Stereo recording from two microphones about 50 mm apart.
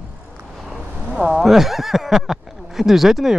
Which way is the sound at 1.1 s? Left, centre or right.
Centre.